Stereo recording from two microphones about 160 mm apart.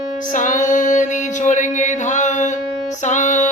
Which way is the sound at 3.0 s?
50° left (ahead or behind).